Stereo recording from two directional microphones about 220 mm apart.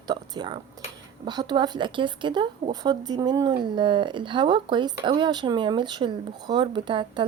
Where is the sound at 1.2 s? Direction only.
20° right (ahead or behind).